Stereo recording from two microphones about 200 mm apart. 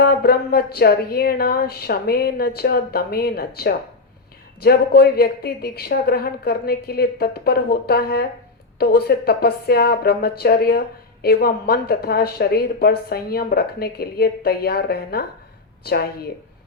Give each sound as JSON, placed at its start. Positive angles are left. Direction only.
{"t": 0.0, "sound": "a woman's voice", "side_deg": 50}